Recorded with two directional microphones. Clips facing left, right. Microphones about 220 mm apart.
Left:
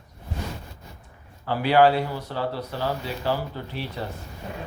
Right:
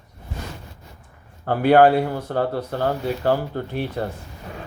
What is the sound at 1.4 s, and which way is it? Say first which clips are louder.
Speech: right 4 dB; 50° right (ahead or behind).